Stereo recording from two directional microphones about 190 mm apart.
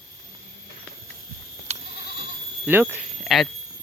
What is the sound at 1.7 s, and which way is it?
Goat, 35° right (ahead or behind).